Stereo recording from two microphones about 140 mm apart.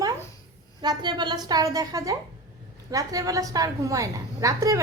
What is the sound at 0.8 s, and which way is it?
A woman's voice, 30° right (ahead or behind).